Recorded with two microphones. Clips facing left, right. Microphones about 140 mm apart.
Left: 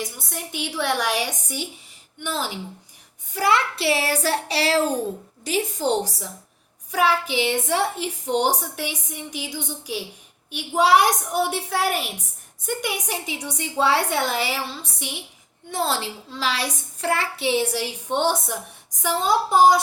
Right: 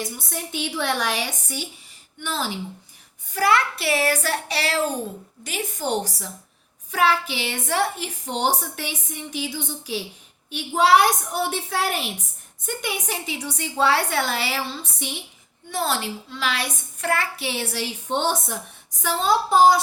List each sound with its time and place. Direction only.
0.0 s a woman's voice: 15° left (ahead or behind)
3.3 s child singing: 20° left (ahead or behind)
5.4 s a woman's voice: 35° left (ahead or behind); by 15.1 s 10° left (ahead or behind)
15.7 s a woman's voice: 25° left (ahead or behind)